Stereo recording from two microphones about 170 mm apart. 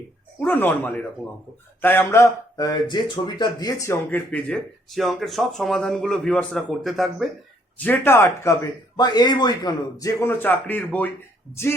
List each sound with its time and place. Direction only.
0.3 s speech: 10° left (ahead or behind)
7.9 s speech: 15° left (ahead or behind)
9.0 s speech: 25° left (ahead or behind); by 11.1 s 10° left (ahead or behind)